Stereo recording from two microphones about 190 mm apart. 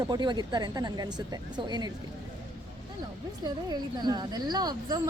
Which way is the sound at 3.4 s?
20° right (ahead or behind).